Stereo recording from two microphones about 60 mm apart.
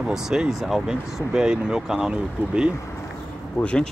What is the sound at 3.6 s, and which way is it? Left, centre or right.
Speech, centre.